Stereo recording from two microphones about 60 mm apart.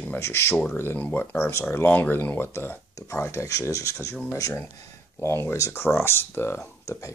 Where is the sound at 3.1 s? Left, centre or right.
Left.